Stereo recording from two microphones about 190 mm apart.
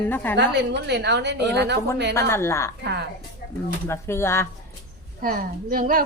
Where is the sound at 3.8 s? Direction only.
15° left (ahead or behind).